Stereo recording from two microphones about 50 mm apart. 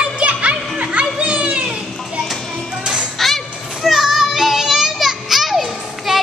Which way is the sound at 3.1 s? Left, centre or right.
Centre.